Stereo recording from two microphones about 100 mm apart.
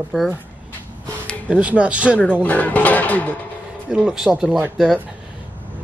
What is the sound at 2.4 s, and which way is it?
Speech, 15° left (ahead or behind).